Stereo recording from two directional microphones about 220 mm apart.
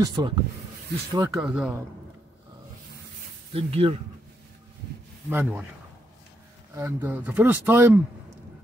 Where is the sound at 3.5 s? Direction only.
25° right (ahead or behind).